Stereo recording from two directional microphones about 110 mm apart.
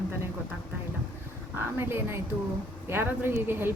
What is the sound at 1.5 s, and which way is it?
Speech, 20° right (ahead or behind).